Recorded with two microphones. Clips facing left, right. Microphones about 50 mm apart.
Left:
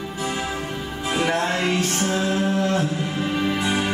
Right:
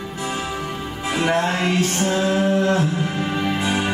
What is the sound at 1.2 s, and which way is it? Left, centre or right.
Music, centre.